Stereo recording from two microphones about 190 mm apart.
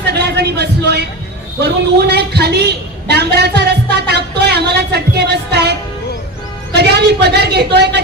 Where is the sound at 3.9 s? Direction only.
60° right (ahead or behind).